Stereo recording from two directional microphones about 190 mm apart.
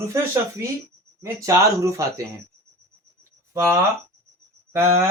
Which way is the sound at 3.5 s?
15° right (ahead or behind).